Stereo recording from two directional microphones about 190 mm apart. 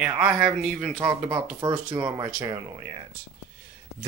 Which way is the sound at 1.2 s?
20° right (ahead or behind).